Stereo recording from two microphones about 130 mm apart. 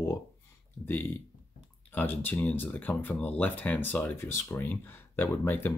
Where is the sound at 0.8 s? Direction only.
15° left (ahead or behind).